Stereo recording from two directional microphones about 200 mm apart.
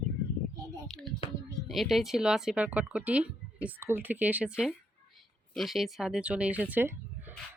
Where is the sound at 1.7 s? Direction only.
Centre (ahead or behind).